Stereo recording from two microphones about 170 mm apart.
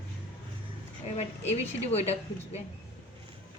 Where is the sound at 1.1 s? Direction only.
40° left (ahead or behind).